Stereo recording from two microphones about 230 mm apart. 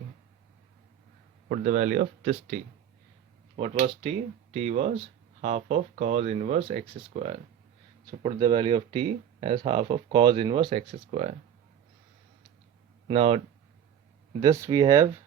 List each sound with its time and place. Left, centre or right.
1.5 s speech: right
13.1 s speech: right
14.4 s speech: centre